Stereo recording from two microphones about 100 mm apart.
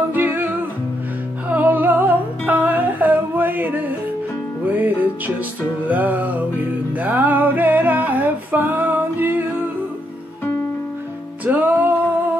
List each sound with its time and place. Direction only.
0.1 s music: 20° right (ahead or behind)
11.4 s music: 15° right (ahead or behind)